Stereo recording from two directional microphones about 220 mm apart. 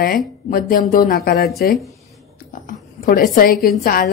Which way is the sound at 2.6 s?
40° left (ahead or behind).